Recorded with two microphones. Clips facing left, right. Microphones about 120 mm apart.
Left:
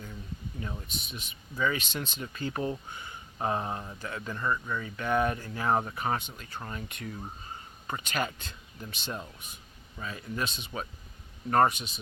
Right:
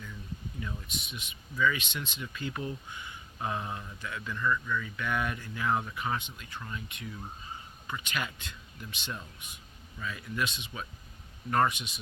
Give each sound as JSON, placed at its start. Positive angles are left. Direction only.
{"t": 0.6, "sound": "speech", "side_deg": 35}